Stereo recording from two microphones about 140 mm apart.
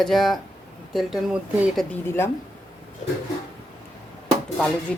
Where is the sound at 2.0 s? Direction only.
15° left (ahead or behind).